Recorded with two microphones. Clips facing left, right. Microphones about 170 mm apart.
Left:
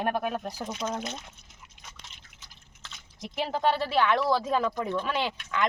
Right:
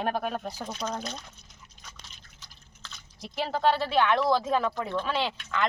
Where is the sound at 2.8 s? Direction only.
20° left (ahead or behind).